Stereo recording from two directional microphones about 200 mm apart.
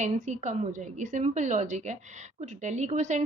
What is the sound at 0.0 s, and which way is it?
A woman's voice, 35° right (ahead or behind).